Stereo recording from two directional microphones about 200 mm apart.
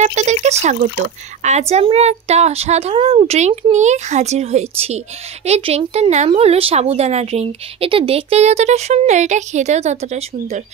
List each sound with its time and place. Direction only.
0.0 s speech: 35° right (ahead or behind)